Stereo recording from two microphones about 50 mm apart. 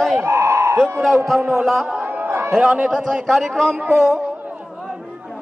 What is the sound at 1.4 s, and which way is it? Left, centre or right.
Speech, centre.